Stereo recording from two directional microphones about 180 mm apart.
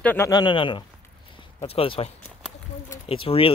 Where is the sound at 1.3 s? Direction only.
30° left (ahead or behind).